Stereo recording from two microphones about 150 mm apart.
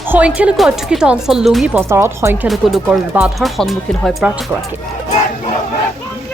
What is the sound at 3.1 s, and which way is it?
Speech, 5° right (ahead or behind).